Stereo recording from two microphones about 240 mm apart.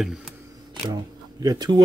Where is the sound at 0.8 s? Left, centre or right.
Centre.